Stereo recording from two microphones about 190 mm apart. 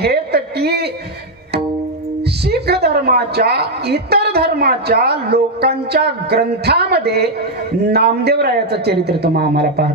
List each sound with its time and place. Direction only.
0.0 s a woman's voice: 55° right (ahead or behind)
2.4 s a woman's voice: 60° right (ahead or behind)